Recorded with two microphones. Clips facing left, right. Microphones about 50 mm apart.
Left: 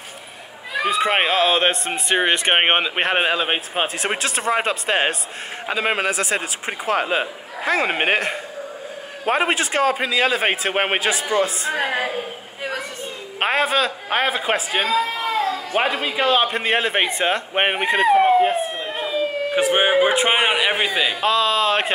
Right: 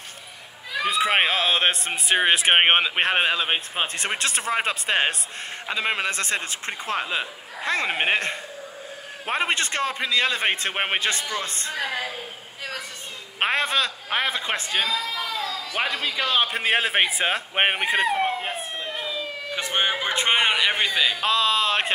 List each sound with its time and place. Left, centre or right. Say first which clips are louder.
0.8 s speech: left 2 dB; centre
11.7 s a woman's voice: left 6 dB; left
13.4 s speech: left 4 dB; centre
14.0 s speech: left 5 dB; centre
15.0 s a sound: left 7 dB; left
15.8 s speech: left 4 dB; left
16.3 s speech: left 3 dB; centre
18.1 s emergency vehicle: left 10 dB; centre
18.9 s a man's voice: left 12 dB; left; by 21.9 s centre